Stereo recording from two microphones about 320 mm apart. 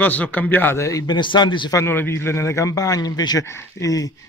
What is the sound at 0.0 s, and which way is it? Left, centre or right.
A man's voice, centre.